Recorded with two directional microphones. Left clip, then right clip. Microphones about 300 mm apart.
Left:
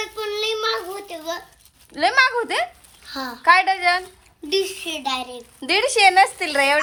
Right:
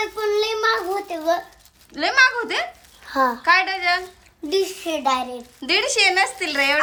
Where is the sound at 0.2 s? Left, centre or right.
Centre.